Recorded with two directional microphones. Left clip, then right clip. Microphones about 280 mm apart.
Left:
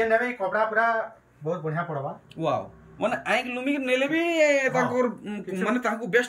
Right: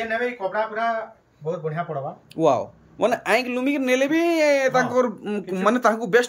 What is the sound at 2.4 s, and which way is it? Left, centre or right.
Speech, centre.